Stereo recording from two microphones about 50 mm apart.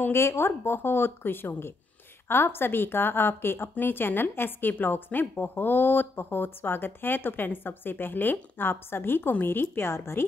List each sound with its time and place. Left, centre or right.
0.1 s speech: left
0.5 s speech: left